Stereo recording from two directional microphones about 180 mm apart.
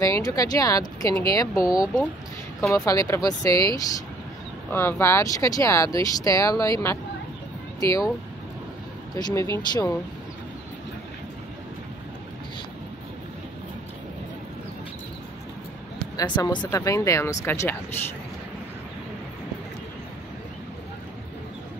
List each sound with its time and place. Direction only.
0.0 s speech: 20° left (ahead or behind)
7.8 s speech: 20° left (ahead or behind)
9.1 s speech: 20° left (ahead or behind)
16.2 s speech: 25° left (ahead or behind)